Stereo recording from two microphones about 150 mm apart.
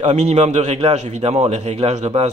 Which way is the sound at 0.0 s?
50° right (ahead or behind).